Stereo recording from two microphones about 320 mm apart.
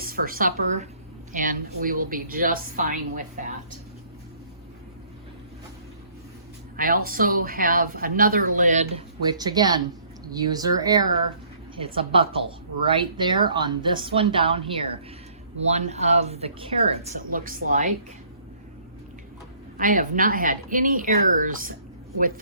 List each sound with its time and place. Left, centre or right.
0.0 s a woman's voice: right
6.7 s speech: right
19.8 s speech: right